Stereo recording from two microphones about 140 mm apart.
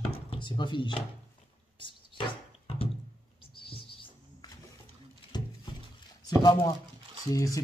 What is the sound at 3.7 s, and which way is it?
Music, 40° left (ahead or behind).